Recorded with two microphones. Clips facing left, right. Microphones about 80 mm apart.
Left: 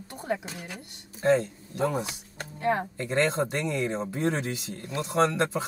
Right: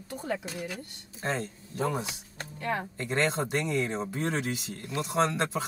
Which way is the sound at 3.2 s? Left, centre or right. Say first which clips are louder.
Left 1 dB; centre.